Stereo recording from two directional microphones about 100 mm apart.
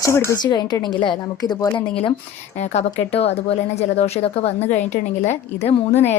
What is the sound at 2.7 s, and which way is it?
A woman's voice, 85° left.